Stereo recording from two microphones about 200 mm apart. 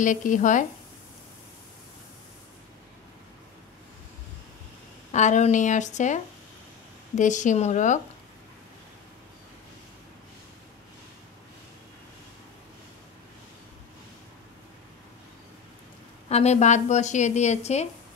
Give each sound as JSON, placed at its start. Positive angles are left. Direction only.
{"t": 0.0, "sound": "a woman's voice", "side_deg": 40}
{"t": 5.1, "sound": "a woman's voice", "side_deg": 35}
{"t": 16.3, "sound": "a woman's voice", "side_deg": 35}